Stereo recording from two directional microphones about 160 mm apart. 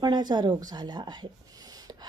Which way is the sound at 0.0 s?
25° right (ahead or behind).